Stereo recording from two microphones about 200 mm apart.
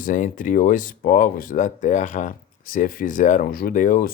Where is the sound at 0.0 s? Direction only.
40° left (ahead or behind).